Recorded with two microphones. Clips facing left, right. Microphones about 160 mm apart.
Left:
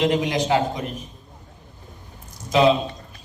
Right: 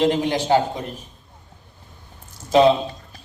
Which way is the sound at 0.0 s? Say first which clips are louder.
Right 1 dB; 30° right (ahead or behind).